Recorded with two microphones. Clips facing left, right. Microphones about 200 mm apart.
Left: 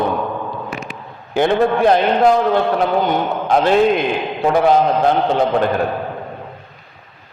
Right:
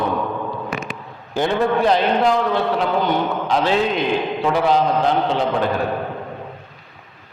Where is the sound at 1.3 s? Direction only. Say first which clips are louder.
Left 4 dB; 55° left (ahead or behind).